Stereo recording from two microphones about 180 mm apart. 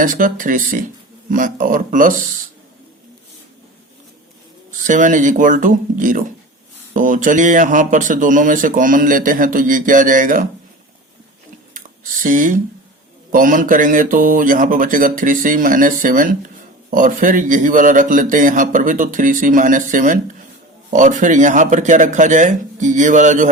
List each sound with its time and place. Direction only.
0.0 s speech: 45° right (ahead or behind)
4.8 s speech: 45° right (ahead or behind)
12.2 s speech: 45° right (ahead or behind)